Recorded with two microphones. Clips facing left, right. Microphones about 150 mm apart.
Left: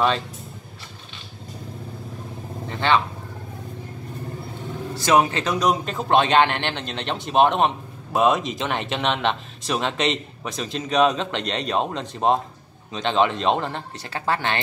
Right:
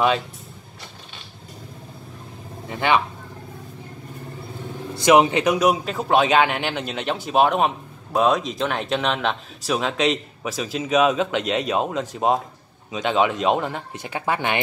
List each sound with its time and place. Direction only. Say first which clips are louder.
2.7 s speech: even; 15° right (ahead or behind)
4.9 s speech: right 4 dB; 20° right (ahead or behind)